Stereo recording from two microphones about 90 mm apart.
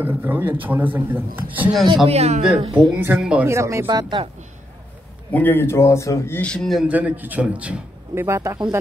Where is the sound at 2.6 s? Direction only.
75° right (ahead or behind).